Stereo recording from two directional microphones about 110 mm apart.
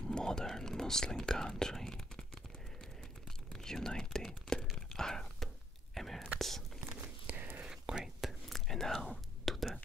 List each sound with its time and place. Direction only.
0.0 s whispering: 5° left (ahead or behind)
3.5 s whispering: 5° left (ahead or behind)
6.9 s a sound: 15° right (ahead or behind)
7.7 s whispering: 5° right (ahead or behind)